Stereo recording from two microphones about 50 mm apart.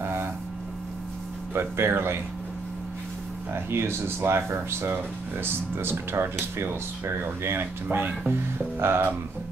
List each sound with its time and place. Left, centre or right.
0.0 s a sound: right
1.5 s speech: right
3.5 s speech: right
7.4 s speech: right